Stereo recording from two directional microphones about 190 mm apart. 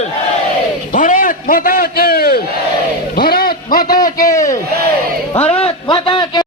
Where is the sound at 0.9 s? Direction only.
45° left (ahead or behind).